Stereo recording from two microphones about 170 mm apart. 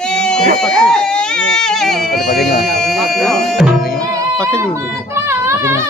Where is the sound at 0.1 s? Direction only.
5° left (ahead or behind).